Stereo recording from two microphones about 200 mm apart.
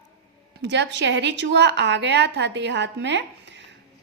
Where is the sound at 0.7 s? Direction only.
60° right (ahead or behind).